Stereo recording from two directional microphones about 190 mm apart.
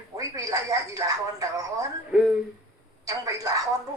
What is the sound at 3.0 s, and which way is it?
Speech, 20° right (ahead or behind).